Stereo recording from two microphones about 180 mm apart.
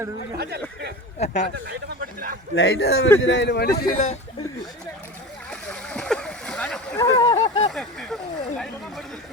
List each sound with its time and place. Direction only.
1.2 s speech: 40° left (ahead or behind)
1.5 s speech: 60° right (ahead or behind)
2.6 s a man's voice: 65° left (ahead or behind)
3.2 s a man's voice: 90° left; by 4.2 s 45° left (ahead or behind)
5.5 s splash: 5° left (ahead or behind)
7.0 s a sound: 25° left (ahead or behind)
7.7 s a sound: centre (ahead or behind)